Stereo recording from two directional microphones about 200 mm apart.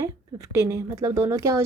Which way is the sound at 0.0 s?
15° right (ahead or behind).